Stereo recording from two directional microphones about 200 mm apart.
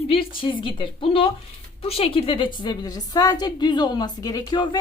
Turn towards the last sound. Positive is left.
turn(degrees=20)  # may be behind; listen again after turning